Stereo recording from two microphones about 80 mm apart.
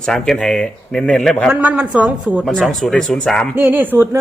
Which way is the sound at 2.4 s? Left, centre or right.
Centre.